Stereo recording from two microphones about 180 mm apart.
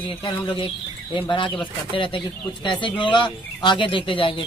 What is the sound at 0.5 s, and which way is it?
Speech, 30° left (ahead or behind).